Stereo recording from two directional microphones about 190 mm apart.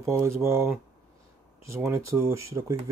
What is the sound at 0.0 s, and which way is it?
Speech, 15° right (ahead or behind).